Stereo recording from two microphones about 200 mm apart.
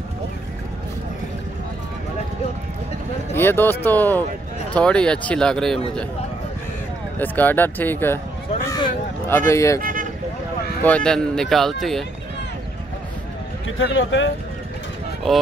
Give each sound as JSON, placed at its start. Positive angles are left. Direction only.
{"t": 3.3, "sound": "speech", "side_deg": 10}
{"t": 7.2, "sound": "speech", "side_deg": 10}
{"t": 8.6, "sound": "a sound", "side_deg": 20}
{"t": 9.5, "sound": "speech", "side_deg": 15}
{"t": 9.8, "sound": "vehicle", "side_deg": -45}
{"t": 10.8, "sound": "speech", "side_deg": 5}
{"t": 13.7, "sound": "a man's voice", "side_deg": 70}